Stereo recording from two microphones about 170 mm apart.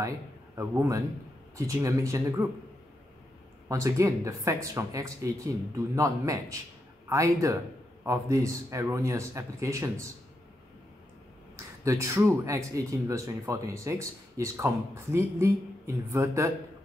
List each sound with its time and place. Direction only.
0.6 s speech: 20° right (ahead or behind)
3.6 s speech: 20° right (ahead or behind)
11.5 s speech: 15° right (ahead or behind)